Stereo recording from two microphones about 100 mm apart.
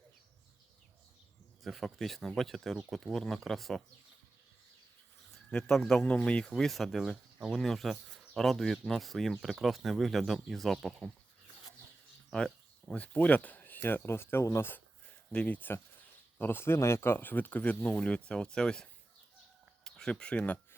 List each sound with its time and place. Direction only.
1.6 s speech: centre (ahead or behind)
5.5 s speech: 5° left (ahead or behind)
12.3 s speech: 10° left (ahead or behind); by 14.8 s 25° left (ahead or behind)
15.3 s speech: 15° left (ahead or behind)